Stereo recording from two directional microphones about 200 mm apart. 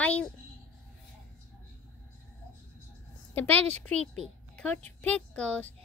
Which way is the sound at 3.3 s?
10° left (ahead or behind).